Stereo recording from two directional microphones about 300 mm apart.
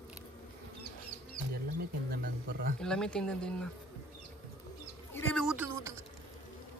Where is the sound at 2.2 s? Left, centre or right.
Right.